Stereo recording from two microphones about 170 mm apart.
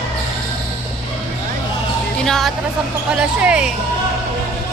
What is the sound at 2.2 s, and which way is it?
Music, centre (ahead or behind).